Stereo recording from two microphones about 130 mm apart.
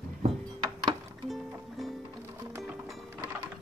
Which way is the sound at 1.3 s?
Centre (ahead or behind).